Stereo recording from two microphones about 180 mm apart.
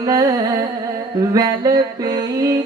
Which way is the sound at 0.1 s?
20° right (ahead or behind).